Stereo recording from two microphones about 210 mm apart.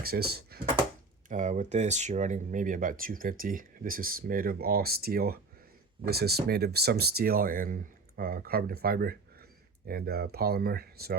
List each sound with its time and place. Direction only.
0.0 s speech: 45° right (ahead or behind)
1.3 s speech: 35° right (ahead or behind)